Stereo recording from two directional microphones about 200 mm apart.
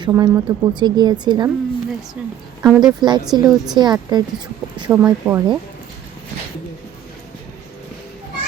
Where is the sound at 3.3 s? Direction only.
20° right (ahead or behind).